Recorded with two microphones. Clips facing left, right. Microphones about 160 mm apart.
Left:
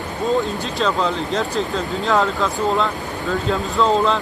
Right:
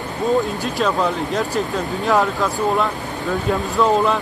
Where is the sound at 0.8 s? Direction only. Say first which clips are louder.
Right 1 dB; 5° right (ahead or behind).